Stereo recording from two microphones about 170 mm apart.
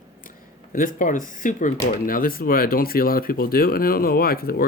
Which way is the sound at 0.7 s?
50° left (ahead or behind).